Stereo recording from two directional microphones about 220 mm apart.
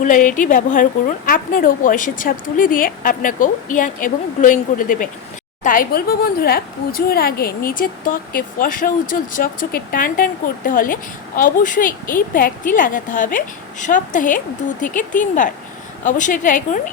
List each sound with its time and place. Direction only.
0.0 s speech: 35° left (ahead or behind)